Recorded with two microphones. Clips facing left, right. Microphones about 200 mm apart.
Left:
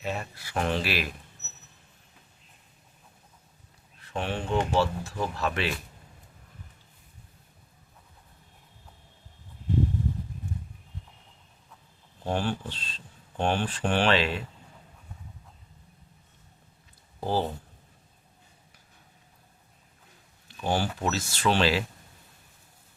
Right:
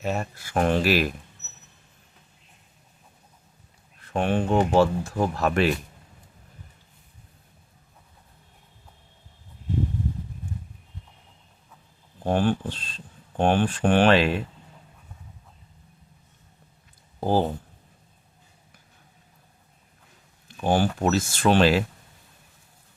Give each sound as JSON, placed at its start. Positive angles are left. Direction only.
{"t": 0.0, "sound": "speech", "side_deg": -45}
{"t": 4.0, "sound": "speech", "side_deg": -50}
{"t": 12.2, "sound": "speech", "side_deg": -50}
{"t": 17.2, "sound": "speech", "side_deg": -50}
{"t": 20.6, "sound": "speech", "side_deg": -50}